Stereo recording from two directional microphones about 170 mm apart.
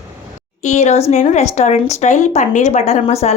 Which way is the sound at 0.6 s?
45° left (ahead or behind).